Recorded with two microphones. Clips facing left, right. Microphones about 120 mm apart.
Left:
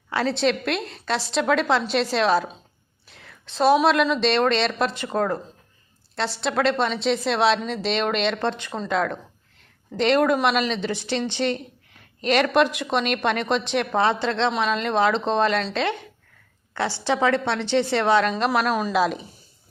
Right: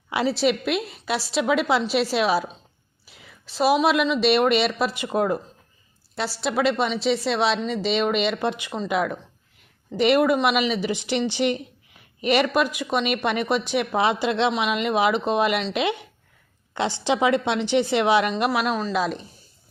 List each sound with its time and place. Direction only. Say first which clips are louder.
0.1 s a woman's voice: right 1 dB; 15° right (ahead or behind)
18.9 s a woman's voice: left 3 dB; centre (ahead or behind)